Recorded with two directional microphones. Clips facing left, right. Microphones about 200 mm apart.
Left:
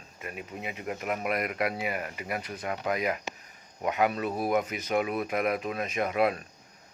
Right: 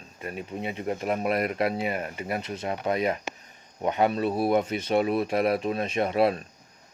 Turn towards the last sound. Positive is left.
turn(degrees=-30)  # may be behind; listen again after turning